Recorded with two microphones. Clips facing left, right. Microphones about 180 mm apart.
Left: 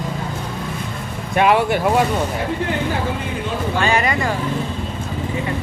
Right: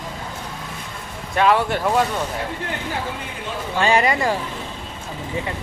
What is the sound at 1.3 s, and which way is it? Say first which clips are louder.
Speech: left 2 dB; 15° left (ahead or behind).